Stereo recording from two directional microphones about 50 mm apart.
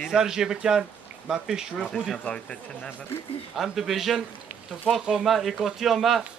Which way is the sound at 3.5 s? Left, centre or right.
Centre.